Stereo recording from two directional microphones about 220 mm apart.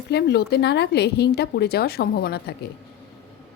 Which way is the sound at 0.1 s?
50° left (ahead or behind).